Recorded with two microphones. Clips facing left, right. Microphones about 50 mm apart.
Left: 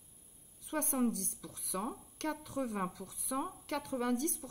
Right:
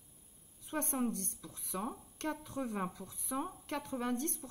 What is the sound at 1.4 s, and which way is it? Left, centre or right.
Speech, right.